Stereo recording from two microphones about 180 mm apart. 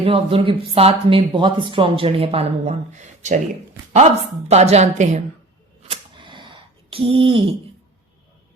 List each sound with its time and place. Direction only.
0.0 s speech: 30° right (ahead or behind)
4.4 s speech: 35° right (ahead or behind)
5.9 s a sound: 25° right (ahead or behind)